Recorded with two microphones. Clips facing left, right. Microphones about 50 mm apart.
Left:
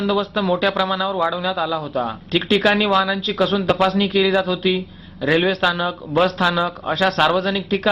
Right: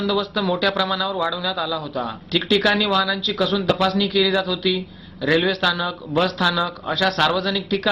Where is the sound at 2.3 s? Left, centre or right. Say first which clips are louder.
Left 1 dB; left.